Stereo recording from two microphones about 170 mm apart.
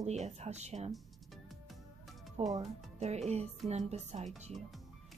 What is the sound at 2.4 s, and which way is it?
Speech, 40° right (ahead or behind).